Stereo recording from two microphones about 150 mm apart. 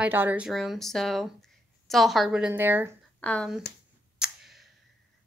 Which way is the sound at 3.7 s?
90° left.